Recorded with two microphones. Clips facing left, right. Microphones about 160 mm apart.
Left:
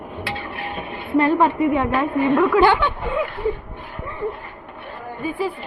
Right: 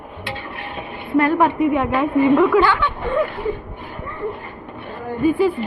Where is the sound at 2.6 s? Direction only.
20° left (ahead or behind).